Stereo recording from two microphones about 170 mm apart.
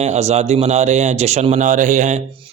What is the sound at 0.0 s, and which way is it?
A man's voice, 40° right (ahead or behind).